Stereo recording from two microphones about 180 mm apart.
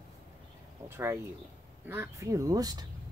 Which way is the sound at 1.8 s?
10° right (ahead or behind).